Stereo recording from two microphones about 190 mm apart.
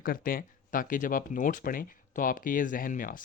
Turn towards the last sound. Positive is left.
turn(degrees=45)  # may be behind; listen again after turning